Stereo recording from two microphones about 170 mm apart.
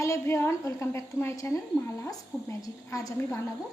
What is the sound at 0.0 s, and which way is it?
A woman's voice, 15° left (ahead or behind).